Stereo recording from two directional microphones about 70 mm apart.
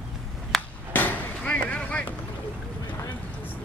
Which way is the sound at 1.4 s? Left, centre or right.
Centre.